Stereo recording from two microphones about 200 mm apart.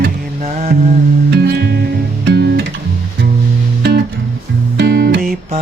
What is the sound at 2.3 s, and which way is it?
Guitar, 55° right (ahead or behind).